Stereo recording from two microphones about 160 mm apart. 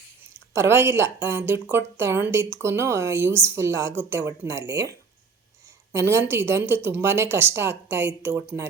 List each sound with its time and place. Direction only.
0.5 s speech: 15° right (ahead or behind)